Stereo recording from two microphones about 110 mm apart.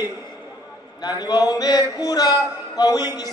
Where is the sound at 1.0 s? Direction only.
40° left (ahead or behind).